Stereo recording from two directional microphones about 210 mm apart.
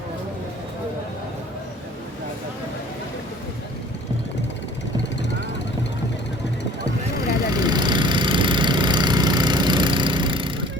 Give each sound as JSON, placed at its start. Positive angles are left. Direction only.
{"t": 7.5, "sound": "vehicle", "side_deg": -20}